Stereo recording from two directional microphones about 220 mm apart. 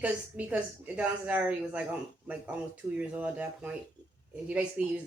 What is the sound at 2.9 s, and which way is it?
A woman's voice, 5° right (ahead or behind).